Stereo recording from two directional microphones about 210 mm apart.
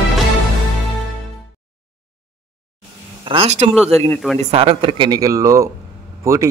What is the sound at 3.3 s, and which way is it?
Speech, 30° right (ahead or behind).